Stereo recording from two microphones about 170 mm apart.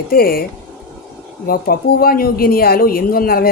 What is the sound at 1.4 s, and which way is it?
Speech, 60° left (ahead or behind).